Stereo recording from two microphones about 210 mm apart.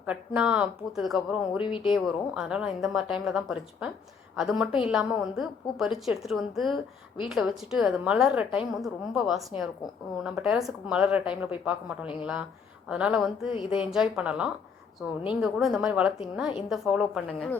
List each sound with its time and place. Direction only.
0.0 s a woman's voice: 5° right (ahead or behind)
1.6 s speech: 25° left (ahead or behind)
1.9 s a woman's voice: centre (ahead or behind)
13.5 s speech: 25° left (ahead or behind)
13.7 s a woman's voice: 5° right (ahead or behind)